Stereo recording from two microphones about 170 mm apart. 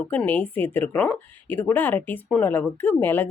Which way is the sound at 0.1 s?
10° left (ahead or behind).